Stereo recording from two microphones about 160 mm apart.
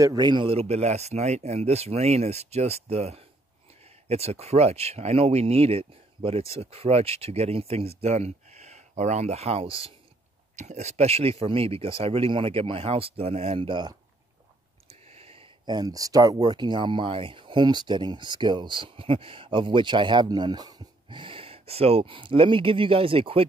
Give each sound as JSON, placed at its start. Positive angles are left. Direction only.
{"t": 0.0, "sound": "speech", "side_deg": -25}
{"t": 10.5, "sound": "speech", "side_deg": -45}